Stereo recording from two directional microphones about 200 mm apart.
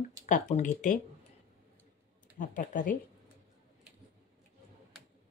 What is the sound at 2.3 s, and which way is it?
Speech, 40° left (ahead or behind).